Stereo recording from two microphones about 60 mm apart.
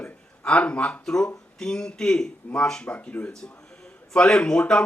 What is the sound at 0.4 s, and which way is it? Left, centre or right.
Speech, centre.